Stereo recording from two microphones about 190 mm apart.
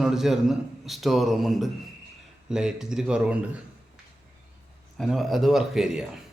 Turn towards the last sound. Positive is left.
turn(degrees=-5)  # may be behind; listen again after turning